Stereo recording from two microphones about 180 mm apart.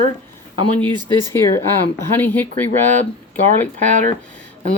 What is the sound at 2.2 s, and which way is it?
Speech, 10° left (ahead or behind).